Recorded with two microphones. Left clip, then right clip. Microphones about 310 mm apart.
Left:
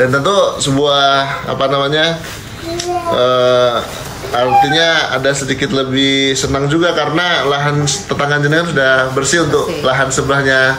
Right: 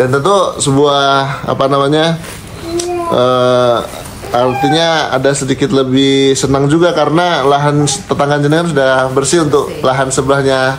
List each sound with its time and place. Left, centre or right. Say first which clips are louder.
0.0 s speech: right 1 dB; centre
0.7 s speech: right 2 dB; centre
3.2 s speech: right 1 dB; centre